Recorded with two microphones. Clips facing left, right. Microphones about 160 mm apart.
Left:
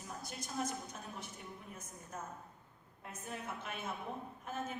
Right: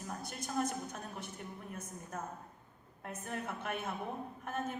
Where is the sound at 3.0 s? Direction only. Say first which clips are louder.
Right 4 dB; 60° right (ahead or behind).